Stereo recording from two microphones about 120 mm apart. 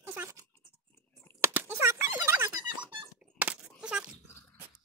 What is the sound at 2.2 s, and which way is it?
Dog, 20° right (ahead or behind).